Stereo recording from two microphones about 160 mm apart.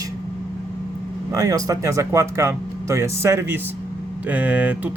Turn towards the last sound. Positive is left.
turn(degrees=-10)  # may be behind; listen again after turning